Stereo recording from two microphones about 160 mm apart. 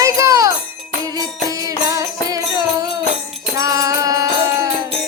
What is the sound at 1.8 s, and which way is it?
Music, 20° right (ahead or behind).